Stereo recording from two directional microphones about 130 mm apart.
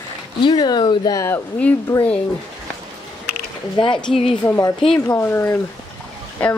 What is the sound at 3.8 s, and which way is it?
Speech, 40° left (ahead or behind).